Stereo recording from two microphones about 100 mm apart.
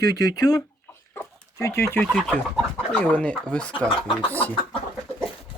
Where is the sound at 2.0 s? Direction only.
5° left (ahead or behind).